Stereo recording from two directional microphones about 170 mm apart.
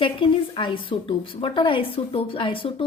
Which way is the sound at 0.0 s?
30° left (ahead or behind).